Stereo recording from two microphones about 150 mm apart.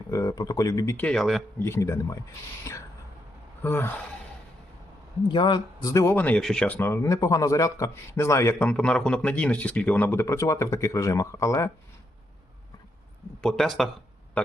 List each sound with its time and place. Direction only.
0.1 s speech: 25° left (ahead or behind)
0.9 s speech: 5° left (ahead or behind)
1.6 s speech: 15° left (ahead or behind)
3.6 s speech: 15° left (ahead or behind)
5.3 s speech: 30° left (ahead or behind)
13.4 s speech: 5° left (ahead or behind)